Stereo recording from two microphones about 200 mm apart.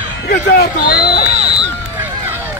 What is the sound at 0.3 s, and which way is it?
Speech, 50° left (ahead or behind).